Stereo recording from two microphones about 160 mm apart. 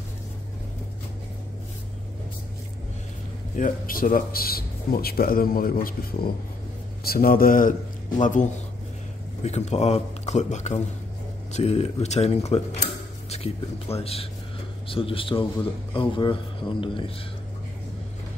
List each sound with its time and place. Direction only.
3.5 s a man's voice: 60° left (ahead or behind); by 12.8 s 40° left (ahead or behind)
13.3 s a sound: 40° left (ahead or behind)
13.9 s speech: 40° left (ahead or behind)